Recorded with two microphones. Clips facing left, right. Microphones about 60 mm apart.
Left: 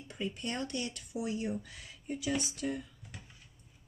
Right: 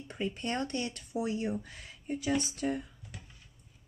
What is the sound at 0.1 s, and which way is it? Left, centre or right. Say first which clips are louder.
A woman's voice: right 3 dB; right.